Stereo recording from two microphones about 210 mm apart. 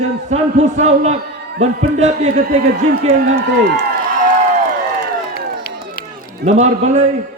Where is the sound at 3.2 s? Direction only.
50° right (ahead or behind).